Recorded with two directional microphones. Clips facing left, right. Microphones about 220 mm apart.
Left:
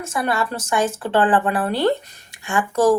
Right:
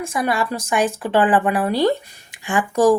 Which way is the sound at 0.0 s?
15° right (ahead or behind).